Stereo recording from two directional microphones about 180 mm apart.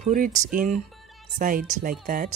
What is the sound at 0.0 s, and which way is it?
Speech, 45° right (ahead or behind).